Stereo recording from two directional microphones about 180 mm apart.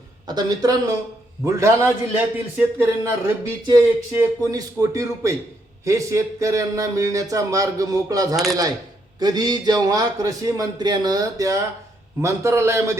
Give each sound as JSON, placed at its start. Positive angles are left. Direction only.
{"t": 0.3, "sound": "speech", "side_deg": -20}